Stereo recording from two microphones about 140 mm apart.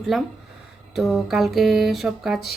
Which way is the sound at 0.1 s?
5° right (ahead or behind).